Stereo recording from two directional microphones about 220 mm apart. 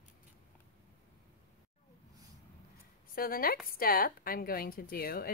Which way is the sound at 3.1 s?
40° left (ahead or behind).